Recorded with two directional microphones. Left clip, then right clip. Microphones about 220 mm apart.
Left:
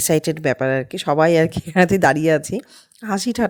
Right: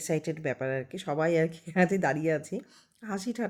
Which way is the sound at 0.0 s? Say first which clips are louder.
Left 12 dB; 45° left (ahead or behind).